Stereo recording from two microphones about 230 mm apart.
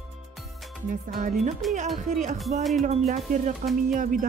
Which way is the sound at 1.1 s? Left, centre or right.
Right.